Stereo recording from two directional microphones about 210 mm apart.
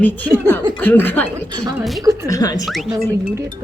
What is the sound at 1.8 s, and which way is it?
Laughter, centre (ahead or behind).